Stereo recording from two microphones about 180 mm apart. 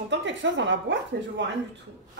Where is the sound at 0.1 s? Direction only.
85° right.